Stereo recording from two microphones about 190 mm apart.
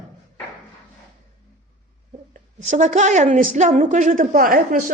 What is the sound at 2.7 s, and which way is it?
A woman's voice, 40° right (ahead or behind).